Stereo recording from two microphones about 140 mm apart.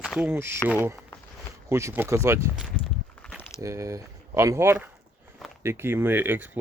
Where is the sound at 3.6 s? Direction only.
20° right (ahead or behind).